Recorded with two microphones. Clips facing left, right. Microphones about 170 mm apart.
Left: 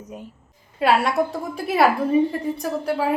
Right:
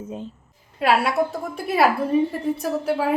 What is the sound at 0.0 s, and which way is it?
Speech, 25° right (ahead or behind).